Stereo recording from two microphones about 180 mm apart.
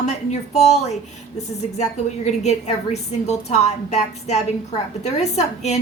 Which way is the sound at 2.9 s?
40° left (ahead or behind).